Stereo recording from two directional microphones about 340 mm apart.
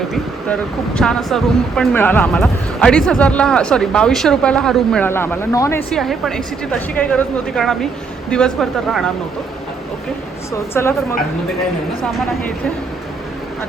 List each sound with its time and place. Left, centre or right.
0.1 s speech: centre
10.8 s speech: centre